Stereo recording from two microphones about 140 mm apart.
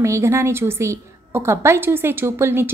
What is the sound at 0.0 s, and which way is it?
A woman's voice, 20° right (ahead or behind).